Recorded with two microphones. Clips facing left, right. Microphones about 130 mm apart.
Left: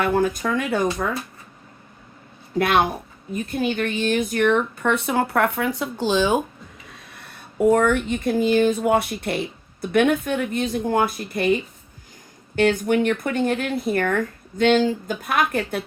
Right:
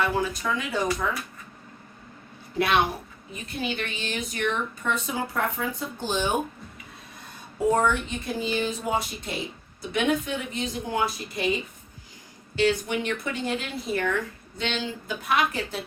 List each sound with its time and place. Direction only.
0.0 s speech: 55° left (ahead or behind)
2.6 s speech: 50° left (ahead or behind); by 6.4 s 90° left
6.9 s speech: 70° left (ahead or behind); by 11.5 s 55° left (ahead or behind)
12.5 s speech: 50° left (ahead or behind)